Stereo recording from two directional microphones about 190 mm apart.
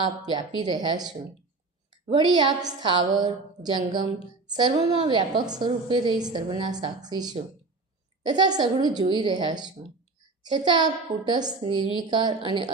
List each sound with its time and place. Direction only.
0.2 s a woman's voice: 20° right (ahead or behind)